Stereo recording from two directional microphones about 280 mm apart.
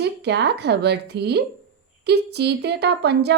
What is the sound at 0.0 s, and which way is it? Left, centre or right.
A woman's voice, right.